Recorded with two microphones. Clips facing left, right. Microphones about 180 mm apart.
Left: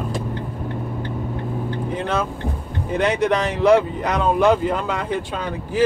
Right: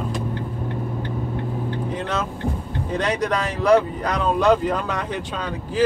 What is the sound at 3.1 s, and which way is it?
Speech, 20° left (ahead or behind).